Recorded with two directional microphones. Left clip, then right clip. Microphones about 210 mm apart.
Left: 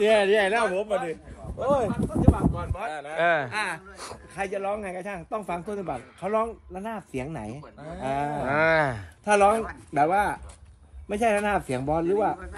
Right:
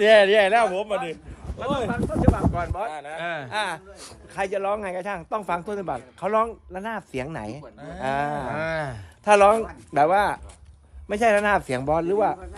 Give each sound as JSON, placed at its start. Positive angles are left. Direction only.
{"t": 0.0, "sound": "speech", "side_deg": 0}
{"t": 2.3, "sound": "speech", "side_deg": -35}
{"t": 2.9, "sound": "speech", "side_deg": 0}
{"t": 3.4, "sound": "speech", "side_deg": -50}
{"t": 4.6, "sound": "speech", "side_deg": -35}
{"t": 4.9, "sound": "speech", "side_deg": 0}